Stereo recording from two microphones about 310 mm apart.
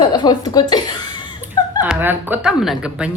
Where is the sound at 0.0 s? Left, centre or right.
Centre.